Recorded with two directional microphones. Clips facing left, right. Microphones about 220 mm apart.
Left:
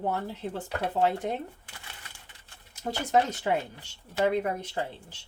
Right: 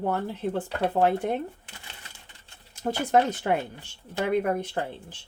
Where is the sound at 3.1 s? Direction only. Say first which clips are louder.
Right 2 dB; 55° right (ahead or behind).